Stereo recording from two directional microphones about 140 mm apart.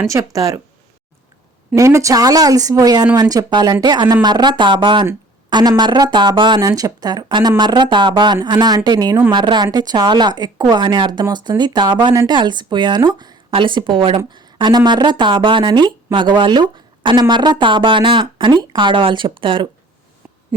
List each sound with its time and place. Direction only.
0.0 s speech: 20° right (ahead or behind)
1.7 s speech: 20° right (ahead or behind); by 19.6 s 40° right (ahead or behind)